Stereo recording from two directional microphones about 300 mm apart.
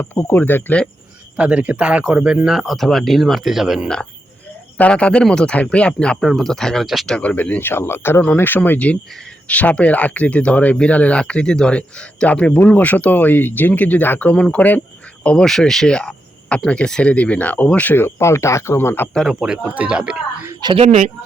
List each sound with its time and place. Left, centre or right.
0.0 s speech: centre
20.6 s speech: centre